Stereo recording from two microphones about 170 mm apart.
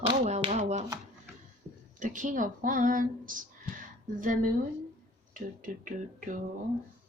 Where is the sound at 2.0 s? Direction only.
50° right (ahead or behind).